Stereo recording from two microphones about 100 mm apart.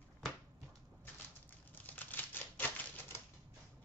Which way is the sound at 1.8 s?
15° left (ahead or behind).